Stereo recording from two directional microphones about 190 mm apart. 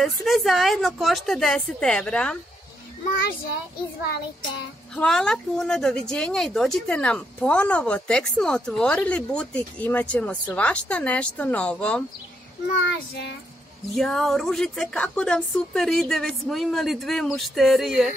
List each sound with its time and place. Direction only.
0.0 s a woman's voice: centre (ahead or behind)
4.9 s a woman's voice: 5° left (ahead or behind)
12.8 s child singing: 65° left (ahead or behind)
13.9 s a woman's voice: 5° left (ahead or behind)